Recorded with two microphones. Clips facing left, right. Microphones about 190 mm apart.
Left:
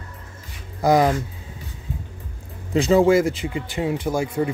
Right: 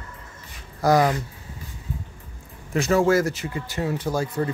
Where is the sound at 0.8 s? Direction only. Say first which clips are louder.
Left 2 dB; 15° left (ahead or behind).